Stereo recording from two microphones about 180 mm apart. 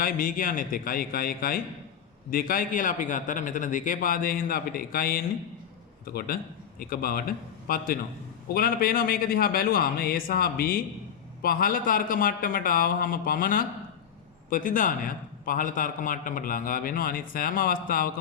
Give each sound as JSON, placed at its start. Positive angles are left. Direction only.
{"t": 0.0, "sound": "a man's voice", "side_deg": 50}